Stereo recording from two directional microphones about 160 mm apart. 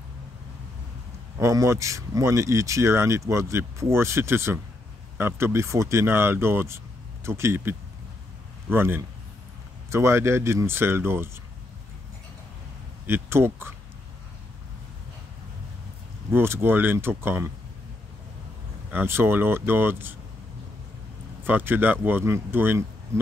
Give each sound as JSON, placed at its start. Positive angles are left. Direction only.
{"t": 1.4, "sound": "speech", "side_deg": -20}
{"t": 13.0, "sound": "speech", "side_deg": -15}
{"t": 16.3, "sound": "speech", "side_deg": -15}
{"t": 18.9, "sound": "speech", "side_deg": -15}
{"t": 21.5, "sound": "speech", "side_deg": -10}